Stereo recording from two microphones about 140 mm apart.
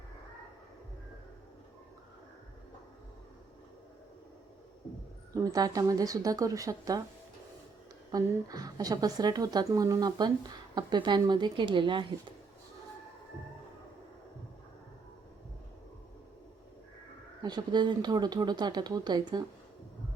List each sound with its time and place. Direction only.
5.3 s a woman's voice: 25° right (ahead or behind)
8.1 s a woman's voice: 25° right (ahead or behind)
17.4 s speech: 30° right (ahead or behind)